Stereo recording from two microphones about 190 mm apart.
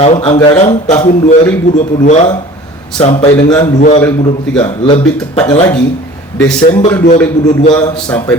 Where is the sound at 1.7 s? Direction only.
40° left (ahead or behind).